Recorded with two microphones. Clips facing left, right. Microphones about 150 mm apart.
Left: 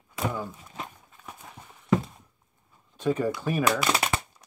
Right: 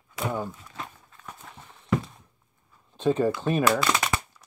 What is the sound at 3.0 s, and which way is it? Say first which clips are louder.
Speech: right 3 dB; 30° right (ahead or behind).